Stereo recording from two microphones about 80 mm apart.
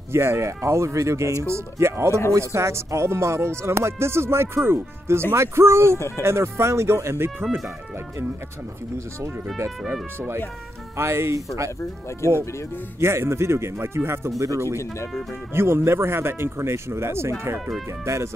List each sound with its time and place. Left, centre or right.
0.1 s speech: right
5.9 s speech: left
6.2 s speech: right
11.0 s speech: right
12.2 s speech: left
13.0 s speech: right